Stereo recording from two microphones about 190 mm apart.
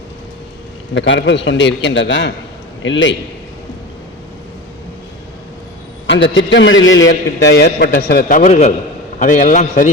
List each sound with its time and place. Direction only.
0.9 s a man's voice: 70° left (ahead or behind)
6.1 s a man's voice: 70° left (ahead or behind); by 9.9 s 40° left (ahead or behind)